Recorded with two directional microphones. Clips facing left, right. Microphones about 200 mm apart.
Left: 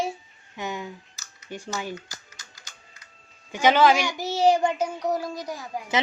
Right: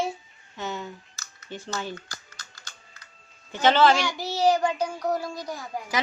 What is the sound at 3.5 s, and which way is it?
Speech, 10° left (ahead or behind).